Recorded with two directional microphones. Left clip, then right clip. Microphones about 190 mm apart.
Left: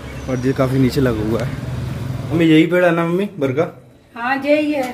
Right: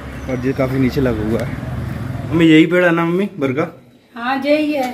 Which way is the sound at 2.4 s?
5° left (ahead or behind).